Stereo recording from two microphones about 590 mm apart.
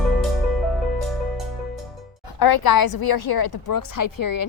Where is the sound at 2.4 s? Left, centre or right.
Left.